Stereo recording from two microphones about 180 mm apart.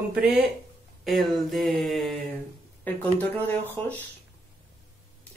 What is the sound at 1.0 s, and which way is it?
Speech, centre (ahead or behind).